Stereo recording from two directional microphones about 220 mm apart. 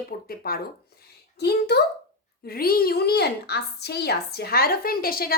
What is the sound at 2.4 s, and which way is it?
A woman's voice, 40° left (ahead or behind).